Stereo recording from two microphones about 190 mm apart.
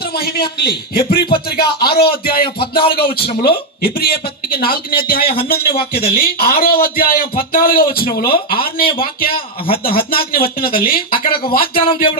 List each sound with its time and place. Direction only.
0.0 s a sound: 55° left (ahead or behind)
0.6 s a man's voice: 55° left (ahead or behind)
5.2 s a man's voice: 30° left (ahead or behind)
5.5 s a man's voice: 55° left (ahead or behind)
9.6 s a man's voice: 30° left (ahead or behind)
9.9 s a man's voice: 50° left (ahead or behind)